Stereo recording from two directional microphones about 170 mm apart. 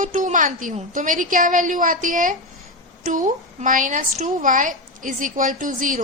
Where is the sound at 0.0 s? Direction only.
50° right (ahead or behind).